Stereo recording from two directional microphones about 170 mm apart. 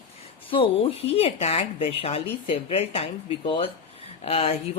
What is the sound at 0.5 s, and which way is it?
A woman's voice, 35° left (ahead or behind).